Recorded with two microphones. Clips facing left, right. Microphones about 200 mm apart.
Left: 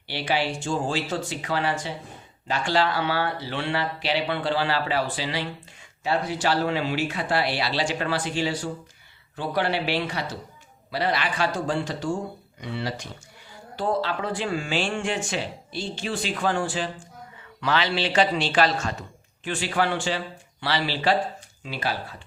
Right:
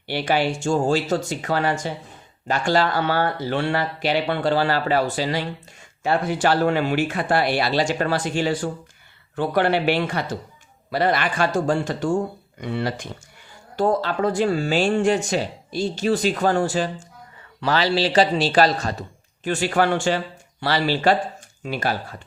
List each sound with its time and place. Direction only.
0.1 s speech: 50° right (ahead or behind)
19.5 s speech: 45° right (ahead or behind)